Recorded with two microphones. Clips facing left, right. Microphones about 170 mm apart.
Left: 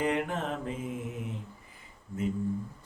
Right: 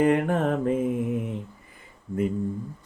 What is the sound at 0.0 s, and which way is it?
Mantra, 55° right (ahead or behind).